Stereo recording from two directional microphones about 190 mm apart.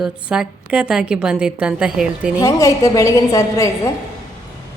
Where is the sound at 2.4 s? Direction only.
15° left (ahead or behind).